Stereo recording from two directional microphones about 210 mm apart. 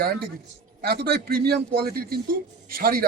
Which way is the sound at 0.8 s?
50° right (ahead or behind).